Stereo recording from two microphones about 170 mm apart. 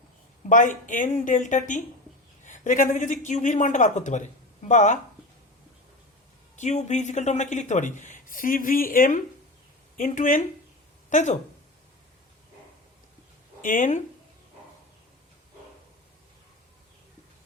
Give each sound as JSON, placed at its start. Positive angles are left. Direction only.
{"t": 0.4, "sound": "a man's voice", "side_deg": 50}
{"t": 6.6, "sound": "a man's voice", "side_deg": 45}
{"t": 13.6, "sound": "a man's voice", "side_deg": 50}